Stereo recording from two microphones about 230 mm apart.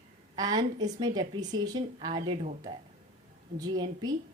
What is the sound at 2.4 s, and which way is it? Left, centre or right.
Speech, right.